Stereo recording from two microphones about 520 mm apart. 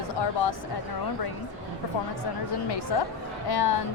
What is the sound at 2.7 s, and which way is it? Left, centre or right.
A woman's voice, left.